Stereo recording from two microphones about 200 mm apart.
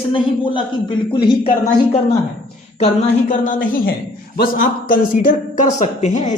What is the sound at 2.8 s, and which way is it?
A woman's voice, 35° left (ahead or behind).